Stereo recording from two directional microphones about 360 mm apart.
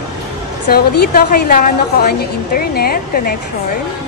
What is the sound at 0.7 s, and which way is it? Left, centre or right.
A woman's voice, left.